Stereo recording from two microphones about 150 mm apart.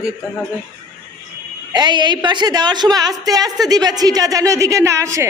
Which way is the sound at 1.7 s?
30° right (ahead or behind).